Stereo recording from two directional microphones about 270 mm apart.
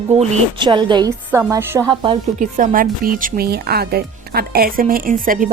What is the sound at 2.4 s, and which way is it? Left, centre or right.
Speech, right.